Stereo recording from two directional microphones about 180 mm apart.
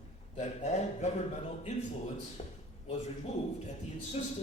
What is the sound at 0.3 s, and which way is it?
Speech, 40° left (ahead or behind).